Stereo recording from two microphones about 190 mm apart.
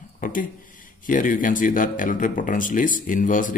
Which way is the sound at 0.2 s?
45° left (ahead or behind).